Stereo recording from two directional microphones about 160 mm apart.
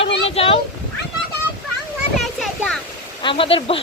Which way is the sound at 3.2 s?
30° left (ahead or behind).